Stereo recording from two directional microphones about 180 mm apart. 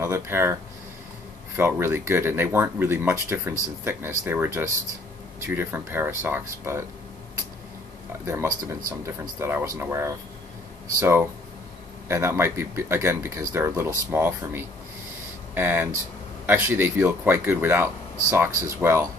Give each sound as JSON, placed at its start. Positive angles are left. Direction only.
{"t": 0.0, "sound": "speech", "side_deg": -15}
{"t": 1.6, "sound": "speech", "side_deg": -15}
{"t": 8.3, "sound": "speech", "side_deg": -15}